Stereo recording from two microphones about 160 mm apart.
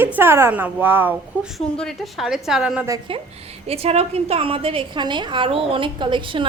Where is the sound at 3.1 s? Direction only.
35° right (ahead or behind).